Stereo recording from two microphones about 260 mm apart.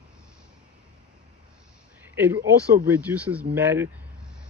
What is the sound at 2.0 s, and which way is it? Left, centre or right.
Speech, centre.